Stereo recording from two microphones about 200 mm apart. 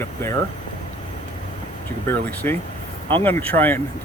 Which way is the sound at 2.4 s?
10° left (ahead or behind).